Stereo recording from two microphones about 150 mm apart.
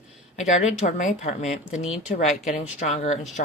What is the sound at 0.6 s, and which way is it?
Speech, 50° left (ahead or behind).